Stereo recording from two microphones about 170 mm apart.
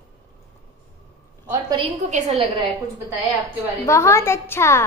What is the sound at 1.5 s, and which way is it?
Speech, 25° right (ahead or behind).